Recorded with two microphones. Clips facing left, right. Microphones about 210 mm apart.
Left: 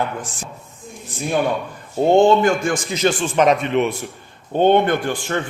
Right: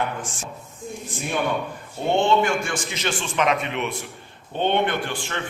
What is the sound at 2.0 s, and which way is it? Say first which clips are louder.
A man's voice: left 6 dB; 40° left (ahead or behind).